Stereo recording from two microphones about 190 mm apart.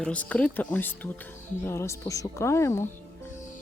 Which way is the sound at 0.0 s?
5° left (ahead or behind).